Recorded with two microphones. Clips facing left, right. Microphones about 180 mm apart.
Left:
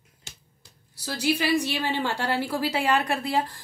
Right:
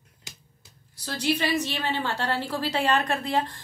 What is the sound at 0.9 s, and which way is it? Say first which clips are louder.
A woman's voice: left 1 dB; 10° left (ahead or behind).